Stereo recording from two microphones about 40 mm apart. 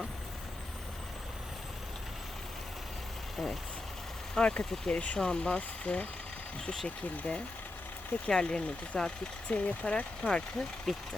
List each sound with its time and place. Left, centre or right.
3.3 s speech: centre
4.4 s speech: left
10.9 s speech: centre